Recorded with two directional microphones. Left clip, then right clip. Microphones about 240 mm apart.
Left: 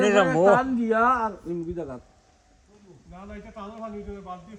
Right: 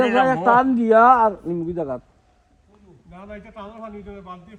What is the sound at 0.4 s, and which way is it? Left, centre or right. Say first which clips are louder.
A man's voice: right 4 dB; right.